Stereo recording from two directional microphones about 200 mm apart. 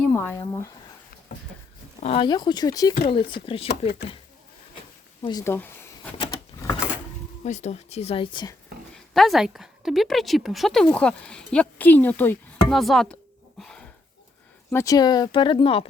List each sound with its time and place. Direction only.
0.0 s speech: 10° left (ahead or behind)
2.0 s speech: 30° left (ahead or behind)
5.2 s speech: 20° left (ahead or behind)
7.4 s speech: 35° left (ahead or behind)
9.0 s a woman's voice: centre (ahead or behind)
13.6 s a sound: 5° left (ahead or behind)
14.7 s speech: 15° left (ahead or behind)